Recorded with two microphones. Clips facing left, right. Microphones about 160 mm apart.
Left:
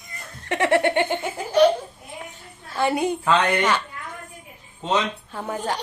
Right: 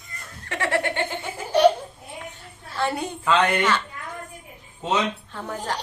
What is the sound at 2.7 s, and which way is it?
Speech, 15° left (ahead or behind).